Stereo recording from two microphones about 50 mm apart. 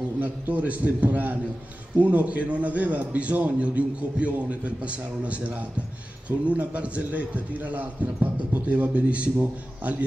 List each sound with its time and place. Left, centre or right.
0.2 s a man's voice: right